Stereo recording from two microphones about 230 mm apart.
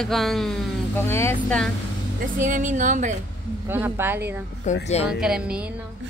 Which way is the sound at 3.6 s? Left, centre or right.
Centre.